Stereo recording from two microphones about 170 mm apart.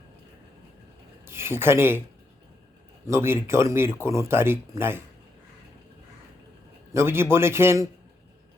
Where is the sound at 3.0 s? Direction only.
15° right (ahead or behind).